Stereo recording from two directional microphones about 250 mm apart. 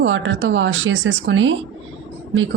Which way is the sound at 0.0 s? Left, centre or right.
Right.